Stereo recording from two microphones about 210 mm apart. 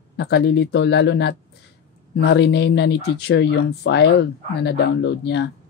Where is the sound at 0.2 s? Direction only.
55° left (ahead or behind).